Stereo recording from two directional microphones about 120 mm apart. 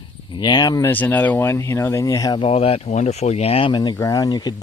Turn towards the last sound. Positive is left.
turn(degrees=35)  # may be behind; listen again after turning